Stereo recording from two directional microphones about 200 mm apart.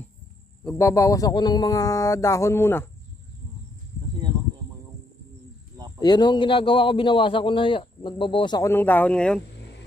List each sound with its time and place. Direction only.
0.7 s speech: 15° left (ahead or behind)
5.9 s a man's voice: 20° left (ahead or behind)
8.7 s speech: 10° left (ahead or behind)